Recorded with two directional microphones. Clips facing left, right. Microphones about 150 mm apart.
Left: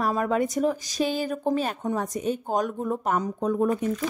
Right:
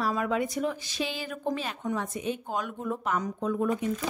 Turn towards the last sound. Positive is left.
turn(degrees=40)  # may be behind; listen again after turning